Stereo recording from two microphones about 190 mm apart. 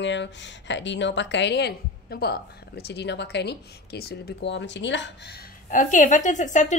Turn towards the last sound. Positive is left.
turn(degrees=40)  # may be behind; listen again after turning